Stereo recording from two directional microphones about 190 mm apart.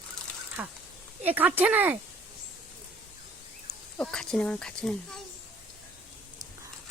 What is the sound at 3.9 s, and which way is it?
Speech, 5° left (ahead or behind).